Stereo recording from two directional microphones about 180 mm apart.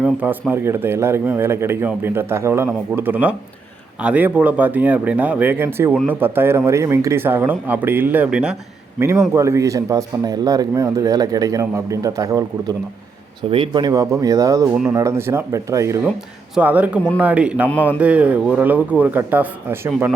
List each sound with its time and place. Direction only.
0.0 s speech: 10° right (ahead or behind)
17.7 s a man's voice: 10° left (ahead or behind)
18.0 s speech: 5° right (ahead or behind)